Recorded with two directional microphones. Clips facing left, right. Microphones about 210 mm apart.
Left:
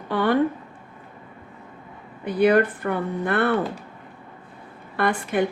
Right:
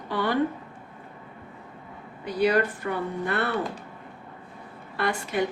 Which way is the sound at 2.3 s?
55° left (ahead or behind).